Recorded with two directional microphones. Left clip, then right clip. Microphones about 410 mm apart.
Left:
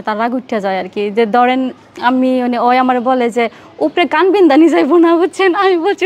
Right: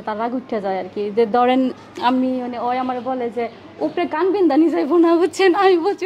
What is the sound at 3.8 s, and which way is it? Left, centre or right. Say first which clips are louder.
A woman's voice: left 8 dB; left.